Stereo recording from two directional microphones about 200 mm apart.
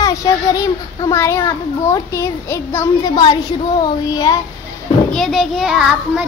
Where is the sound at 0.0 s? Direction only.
15° left (ahead or behind).